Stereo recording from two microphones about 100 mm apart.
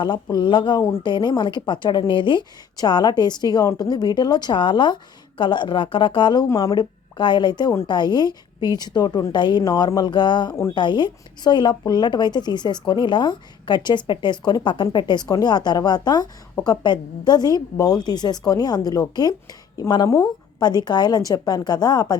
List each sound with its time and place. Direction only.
0.0 s speech: 45° left (ahead or behind)
6.5 s a woman's voice: 35° left (ahead or behind)
6.7 s a woman's voice: 50° left (ahead or behind)